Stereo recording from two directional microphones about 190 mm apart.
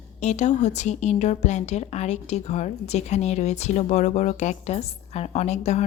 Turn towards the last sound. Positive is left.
turn(degrees=35)  # may be behind; listen again after turning